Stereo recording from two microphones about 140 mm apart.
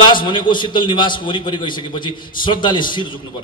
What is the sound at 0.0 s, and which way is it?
A man's voice, 35° left (ahead or behind).